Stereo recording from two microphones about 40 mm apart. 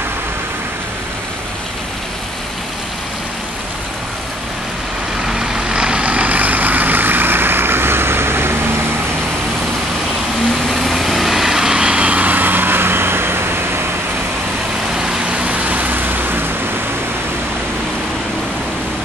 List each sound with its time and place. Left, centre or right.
5.2 s vehicle: centre; by 8.5 s right
10.7 s vehicle: centre; by 13.5 s right
15.0 s vehicle: centre
15.3 s a sound: right